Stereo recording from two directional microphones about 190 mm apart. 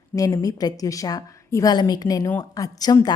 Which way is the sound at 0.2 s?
20° left (ahead or behind).